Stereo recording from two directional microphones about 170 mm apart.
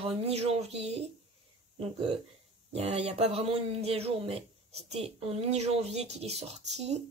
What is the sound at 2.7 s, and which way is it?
Speech, 40° right (ahead or behind).